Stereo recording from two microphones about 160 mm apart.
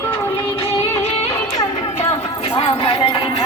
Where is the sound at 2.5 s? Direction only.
35° left (ahead or behind).